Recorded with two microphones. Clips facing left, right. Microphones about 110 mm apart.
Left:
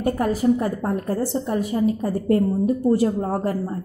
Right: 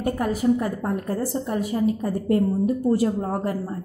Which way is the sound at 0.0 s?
30° left (ahead or behind).